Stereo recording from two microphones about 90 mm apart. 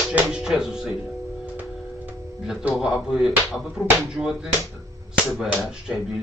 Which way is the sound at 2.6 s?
10° right (ahead or behind).